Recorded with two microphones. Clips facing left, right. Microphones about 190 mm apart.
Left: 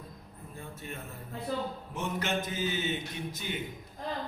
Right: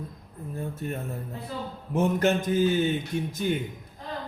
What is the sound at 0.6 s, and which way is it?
Speech, 45° right (ahead or behind).